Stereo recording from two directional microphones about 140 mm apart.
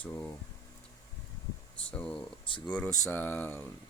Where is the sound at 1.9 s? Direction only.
5° left (ahead or behind).